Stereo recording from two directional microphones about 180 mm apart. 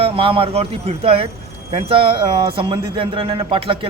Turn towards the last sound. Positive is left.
turn(degrees=-30)  # may be behind; listen again after turning